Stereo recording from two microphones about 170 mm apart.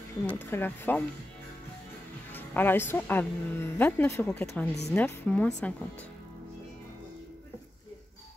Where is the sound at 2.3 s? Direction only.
10° left (ahead or behind).